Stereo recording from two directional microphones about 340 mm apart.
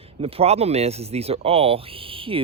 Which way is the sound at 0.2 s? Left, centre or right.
Centre.